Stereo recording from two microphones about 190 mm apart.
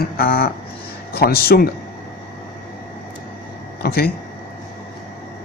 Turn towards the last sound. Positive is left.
turn(degrees=55)  # may be behind; listen again after turning